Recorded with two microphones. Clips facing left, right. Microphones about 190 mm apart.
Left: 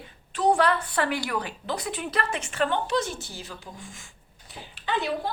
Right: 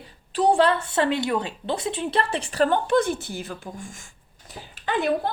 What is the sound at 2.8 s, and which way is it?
Speech, 55° right (ahead or behind).